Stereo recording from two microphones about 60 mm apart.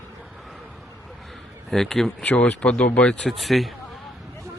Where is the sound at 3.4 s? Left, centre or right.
Centre.